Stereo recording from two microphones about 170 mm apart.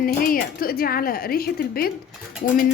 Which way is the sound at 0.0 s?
55° left (ahead or behind).